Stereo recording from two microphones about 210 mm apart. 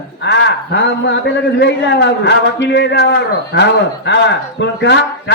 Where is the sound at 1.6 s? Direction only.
55° left (ahead or behind).